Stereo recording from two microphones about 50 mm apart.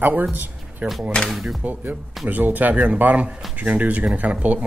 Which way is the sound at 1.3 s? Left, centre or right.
Centre.